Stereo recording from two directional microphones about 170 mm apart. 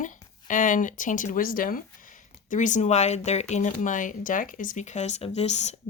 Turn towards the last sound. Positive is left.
turn(degrees=40)  # may be behind; listen again after turning